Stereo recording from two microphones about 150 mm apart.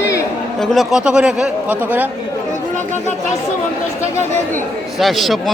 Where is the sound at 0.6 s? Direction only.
Centre (ahead or behind).